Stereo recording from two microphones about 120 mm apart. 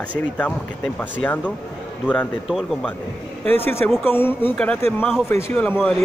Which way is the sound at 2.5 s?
Centre (ahead or behind).